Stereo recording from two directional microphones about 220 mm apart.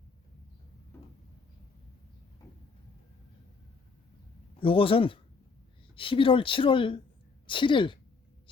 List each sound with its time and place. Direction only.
4.6 s speech: 25° left (ahead or behind)